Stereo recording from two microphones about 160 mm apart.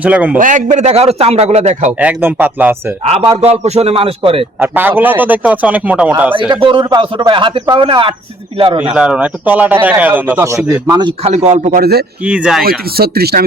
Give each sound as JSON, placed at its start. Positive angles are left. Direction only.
{"t": 0.0, "sound": "a man's voice", "side_deg": -10}
{"t": 0.3, "sound": "a man's voice", "side_deg": -55}
{"t": 1.9, "sound": "a man's voice", "side_deg": -10}
{"t": 3.4, "sound": "a man's voice", "side_deg": -40}
{"t": 4.6, "sound": "a man's voice", "side_deg": -10}
{"t": 6.5, "sound": "a man's voice", "side_deg": -30}
{"t": 8.8, "sound": "a man's voice", "side_deg": -5}
{"t": 10.9, "sound": "a man's voice", "side_deg": -35}
{"t": 11.7, "sound": "speech", "side_deg": -75}
{"t": 12.2, "sound": "a man's voice", "side_deg": -5}
{"t": 13.0, "sound": "speech", "side_deg": -75}